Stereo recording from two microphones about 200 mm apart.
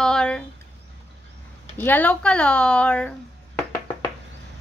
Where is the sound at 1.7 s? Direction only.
10° left (ahead or behind).